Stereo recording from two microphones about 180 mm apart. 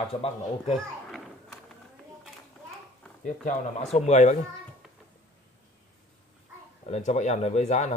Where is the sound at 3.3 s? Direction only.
40° left (ahead or behind).